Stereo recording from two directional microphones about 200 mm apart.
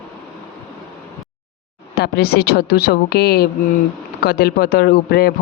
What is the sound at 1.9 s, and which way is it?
Speech, 50° left (ahead or behind).